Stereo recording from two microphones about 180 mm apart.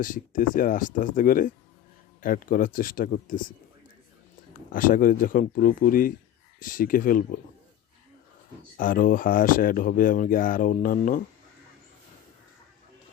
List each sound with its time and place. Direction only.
0.0 s speech: 50° left (ahead or behind)
4.7 s speech: 50° left (ahead or behind)
8.8 s speech: 50° left (ahead or behind)